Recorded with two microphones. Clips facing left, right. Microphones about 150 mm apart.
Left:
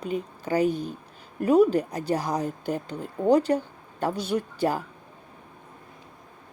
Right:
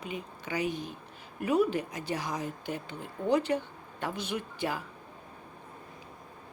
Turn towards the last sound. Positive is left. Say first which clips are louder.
# left 8 dB
turn(degrees=40)  # may be behind; listen again after turning